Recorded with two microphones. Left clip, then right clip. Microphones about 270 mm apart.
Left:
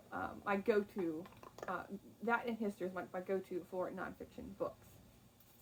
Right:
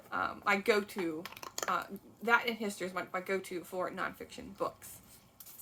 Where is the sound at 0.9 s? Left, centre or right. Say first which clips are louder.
Right 4 dB; right.